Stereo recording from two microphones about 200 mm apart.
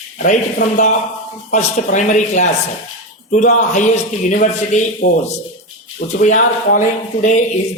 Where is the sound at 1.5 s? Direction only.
35° left (ahead or behind).